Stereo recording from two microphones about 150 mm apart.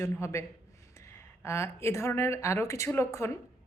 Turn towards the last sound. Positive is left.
turn(degrees=20)  # may be behind; listen again after turning